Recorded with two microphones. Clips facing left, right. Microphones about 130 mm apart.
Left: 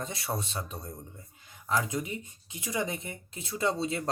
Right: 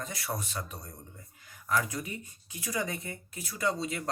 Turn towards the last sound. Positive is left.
turn(degrees=30)  # may be behind; listen again after turning